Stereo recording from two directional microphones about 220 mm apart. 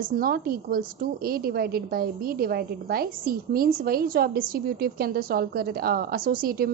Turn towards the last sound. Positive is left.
turn(degrees=-40)  # may be behind; listen again after turning